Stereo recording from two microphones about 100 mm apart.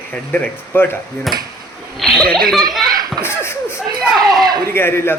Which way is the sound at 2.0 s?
Centre (ahead or behind).